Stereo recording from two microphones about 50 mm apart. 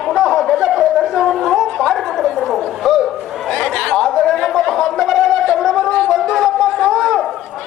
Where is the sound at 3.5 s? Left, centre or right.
Centre.